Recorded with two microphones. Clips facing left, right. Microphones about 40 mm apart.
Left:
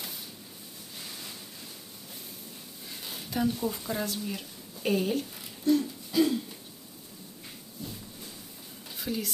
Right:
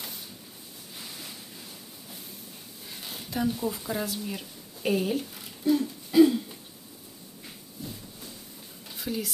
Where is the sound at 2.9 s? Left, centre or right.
Centre.